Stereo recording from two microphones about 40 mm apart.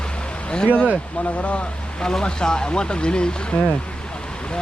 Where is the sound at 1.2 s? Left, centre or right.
Left.